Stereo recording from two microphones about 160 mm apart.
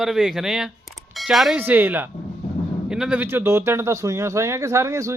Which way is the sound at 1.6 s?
10° right (ahead or behind).